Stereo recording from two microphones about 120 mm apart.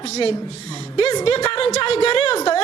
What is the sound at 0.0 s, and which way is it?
A woman's voice, 60° left (ahead or behind).